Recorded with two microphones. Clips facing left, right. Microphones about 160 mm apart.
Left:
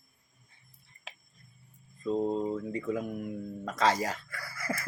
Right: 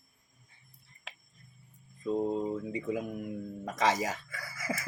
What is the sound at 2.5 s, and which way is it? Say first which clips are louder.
Speech: left 1 dB; 15° right (ahead or behind).